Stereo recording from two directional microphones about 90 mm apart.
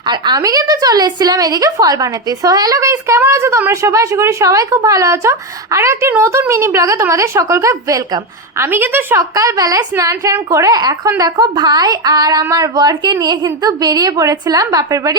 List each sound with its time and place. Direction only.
0.0 s a woman's voice: 55° right (ahead or behind)
8.6 s a woman's voice: 25° right (ahead or behind)
9.3 s a woman's voice: 40° right (ahead or behind)